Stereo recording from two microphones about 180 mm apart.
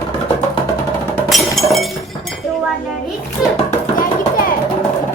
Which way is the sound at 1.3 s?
Centre (ahead or behind).